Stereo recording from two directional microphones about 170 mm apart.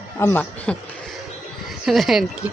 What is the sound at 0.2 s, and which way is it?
Speech, 10° left (ahead or behind).